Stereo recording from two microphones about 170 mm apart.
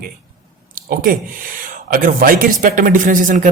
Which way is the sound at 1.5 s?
50° right (ahead or behind).